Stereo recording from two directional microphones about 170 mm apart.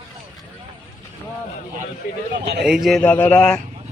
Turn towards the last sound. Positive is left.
turn(degrees=5)  # may be behind; listen again after turning